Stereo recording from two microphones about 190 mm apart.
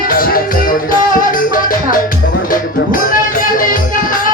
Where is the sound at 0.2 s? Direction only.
50° left (ahead or behind).